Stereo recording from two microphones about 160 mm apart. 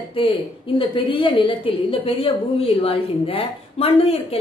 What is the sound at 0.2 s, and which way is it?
A woman's voice, 35° left (ahead or behind).